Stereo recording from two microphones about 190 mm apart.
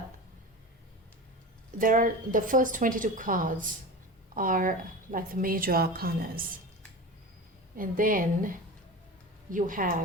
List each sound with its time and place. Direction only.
1.8 s speech: 45° right (ahead or behind)
7.8 s speech: 45° right (ahead or behind)